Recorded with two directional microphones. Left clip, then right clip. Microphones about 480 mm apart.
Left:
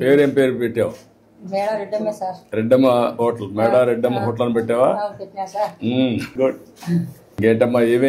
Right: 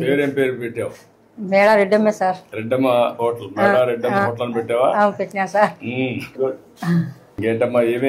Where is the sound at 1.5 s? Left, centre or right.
Right.